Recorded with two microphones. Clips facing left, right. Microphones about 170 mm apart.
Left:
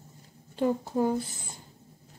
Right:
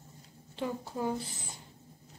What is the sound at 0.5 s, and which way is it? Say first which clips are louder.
Speech: left 9 dB; 45° left (ahead or behind).